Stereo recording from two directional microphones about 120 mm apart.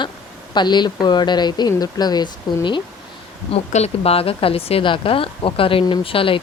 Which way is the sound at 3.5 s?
60° left (ahead or behind).